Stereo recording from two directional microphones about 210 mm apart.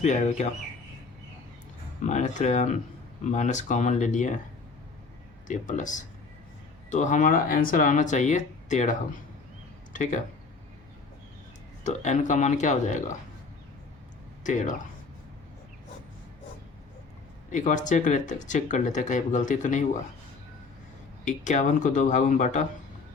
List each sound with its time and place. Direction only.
0.0 s speech: 35° left (ahead or behind)
2.0 s speech: 35° left (ahead or behind)
5.5 s speech: 35° left (ahead or behind)
11.8 s speech: 35° left (ahead or behind)
14.4 s speech: 35° left (ahead or behind)
17.5 s speech: 35° left (ahead or behind)
21.2 s speech: 35° left (ahead or behind)